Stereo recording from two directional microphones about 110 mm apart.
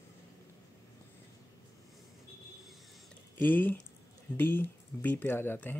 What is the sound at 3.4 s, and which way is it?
Speech, 15° left (ahead or behind).